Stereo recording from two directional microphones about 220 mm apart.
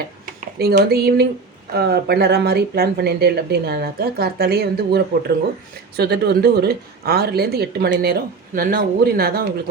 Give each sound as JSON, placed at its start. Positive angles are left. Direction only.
{"t": 0.6, "sound": "speech", "side_deg": -45}